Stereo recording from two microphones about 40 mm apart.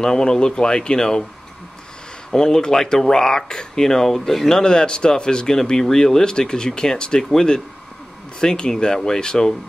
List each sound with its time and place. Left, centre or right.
0.0 s speech: centre
2.3 s speech: centre
4.5 s speech: centre